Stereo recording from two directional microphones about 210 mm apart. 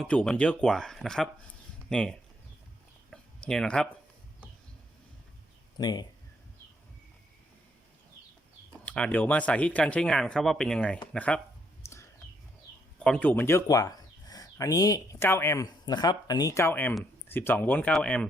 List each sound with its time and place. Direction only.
0.0 s speech: 5° left (ahead or behind)
3.1 s a sound: 5° left (ahead or behind)
5.7 s speech: 20° left (ahead or behind)
8.8 s speech: 5° left (ahead or behind)
11.8 s a sound: 10° left (ahead or behind)
13.1 s speech: 5° left (ahead or behind)